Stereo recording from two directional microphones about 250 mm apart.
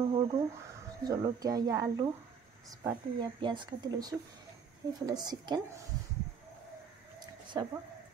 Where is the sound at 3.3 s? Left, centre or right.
Centre.